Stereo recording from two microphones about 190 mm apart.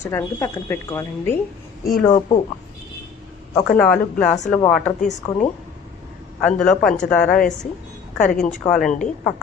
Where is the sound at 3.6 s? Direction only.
5° left (ahead or behind).